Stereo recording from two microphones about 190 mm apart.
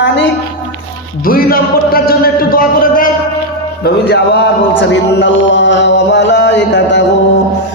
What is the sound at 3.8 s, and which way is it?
Speech, 60° left (ahead or behind).